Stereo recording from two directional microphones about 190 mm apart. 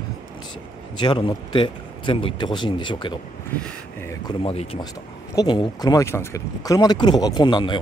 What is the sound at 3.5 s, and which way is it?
Speech, 10° left (ahead or behind).